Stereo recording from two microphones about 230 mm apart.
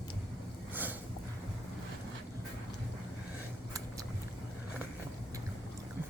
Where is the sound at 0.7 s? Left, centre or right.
Centre.